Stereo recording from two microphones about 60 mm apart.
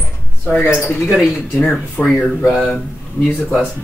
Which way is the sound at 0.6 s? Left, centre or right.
Left.